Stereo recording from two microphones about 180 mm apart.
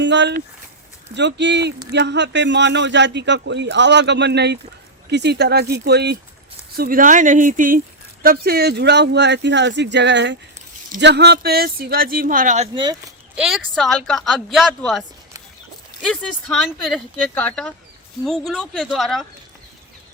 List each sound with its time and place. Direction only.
0.0 s speech: 80° right
6.7 s speech: 55° right (ahead or behind)
12.7 s speech: 25° right (ahead or behind)
13.3 s speech: centre (ahead or behind)
16.0 s speech: centre (ahead or behind)